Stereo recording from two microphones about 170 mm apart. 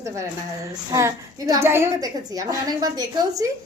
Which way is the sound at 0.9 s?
20° right (ahead or behind).